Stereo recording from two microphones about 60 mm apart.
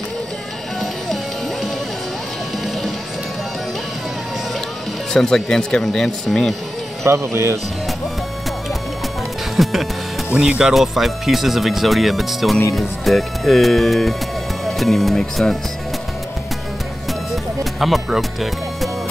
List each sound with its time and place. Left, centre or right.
5.1 s speech: centre
7.1 s speech: right
9.6 s speech: centre
17.3 s music: centre